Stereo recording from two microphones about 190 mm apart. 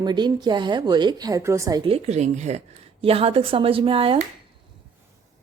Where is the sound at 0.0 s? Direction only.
20° right (ahead or behind).